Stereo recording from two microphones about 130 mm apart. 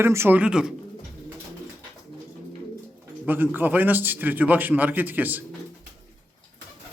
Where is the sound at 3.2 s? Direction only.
15° right (ahead or behind).